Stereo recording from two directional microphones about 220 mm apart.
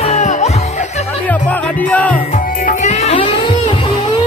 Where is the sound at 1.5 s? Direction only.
5° left (ahead or behind).